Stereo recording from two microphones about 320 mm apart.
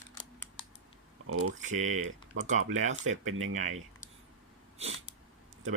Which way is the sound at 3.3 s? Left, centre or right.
Right.